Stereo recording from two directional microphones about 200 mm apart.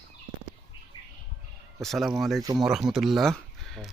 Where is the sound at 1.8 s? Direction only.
Centre (ahead or behind).